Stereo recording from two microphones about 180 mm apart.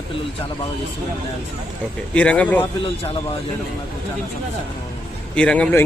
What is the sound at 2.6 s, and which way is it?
Speech, 30° left (ahead or behind).